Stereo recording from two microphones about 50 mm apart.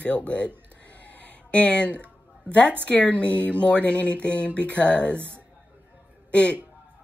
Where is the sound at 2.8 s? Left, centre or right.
Left.